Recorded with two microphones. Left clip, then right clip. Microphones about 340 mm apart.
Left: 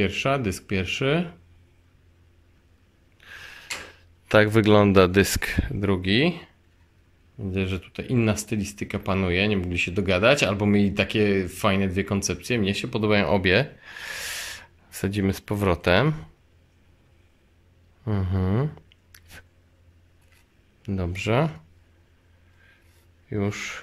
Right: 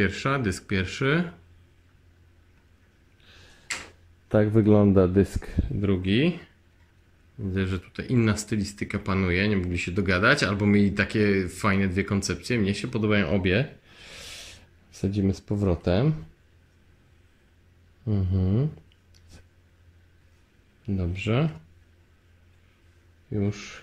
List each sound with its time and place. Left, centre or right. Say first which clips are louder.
0.0 s speech: left 2 dB; centre
4.3 s speech: left 4 dB; left
5.1 s speech: left 4 dB; left
5.8 s speech: left 2 dB; centre
7.5 s speech: left 2 dB; centre; by 15.9 s left
18.0 s speech: left 2 dB; centre
20.8 s speech: left 2 dB; centre
23.4 s speech: left 5 dB; centre